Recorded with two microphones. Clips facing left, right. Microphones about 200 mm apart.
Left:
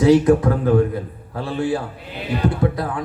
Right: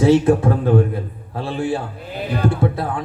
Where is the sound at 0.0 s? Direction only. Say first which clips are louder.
Even; 30° right (ahead or behind).